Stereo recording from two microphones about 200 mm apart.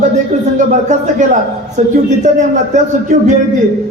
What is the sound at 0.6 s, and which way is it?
A man's voice, 40° right (ahead or behind).